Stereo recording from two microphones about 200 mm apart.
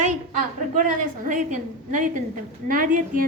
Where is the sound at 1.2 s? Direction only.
40° right (ahead or behind).